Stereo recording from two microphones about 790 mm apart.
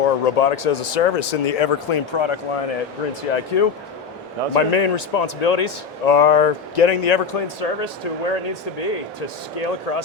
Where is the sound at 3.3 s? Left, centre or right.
Left.